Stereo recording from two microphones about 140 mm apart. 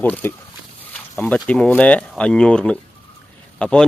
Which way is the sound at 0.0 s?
15° left (ahead or behind).